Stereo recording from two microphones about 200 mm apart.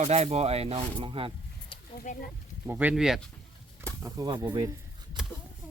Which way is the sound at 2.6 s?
5° right (ahead or behind).